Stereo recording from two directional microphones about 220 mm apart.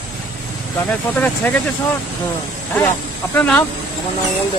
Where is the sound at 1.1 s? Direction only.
5° left (ahead or behind).